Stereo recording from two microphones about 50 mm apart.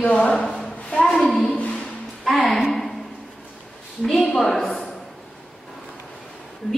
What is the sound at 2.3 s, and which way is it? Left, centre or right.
Speech, centre.